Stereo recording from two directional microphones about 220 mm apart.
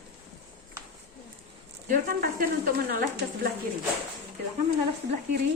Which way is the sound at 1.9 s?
40° right (ahead or behind).